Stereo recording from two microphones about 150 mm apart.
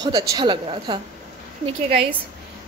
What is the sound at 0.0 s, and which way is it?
Speech, 25° right (ahead or behind).